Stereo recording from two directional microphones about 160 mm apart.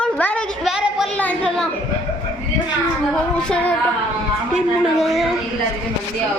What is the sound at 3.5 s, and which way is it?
Speech, 10° left (ahead or behind).